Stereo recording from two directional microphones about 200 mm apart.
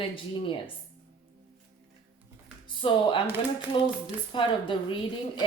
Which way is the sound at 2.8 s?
25° left (ahead or behind).